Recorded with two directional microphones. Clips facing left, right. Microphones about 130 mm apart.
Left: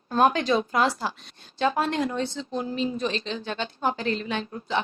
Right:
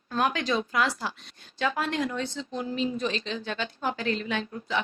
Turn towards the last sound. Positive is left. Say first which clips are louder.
# left 2 dB
turn(degrees=35)  # may be behind; listen again after turning